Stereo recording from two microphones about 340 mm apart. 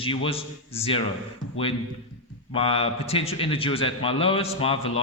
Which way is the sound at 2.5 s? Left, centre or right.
Centre.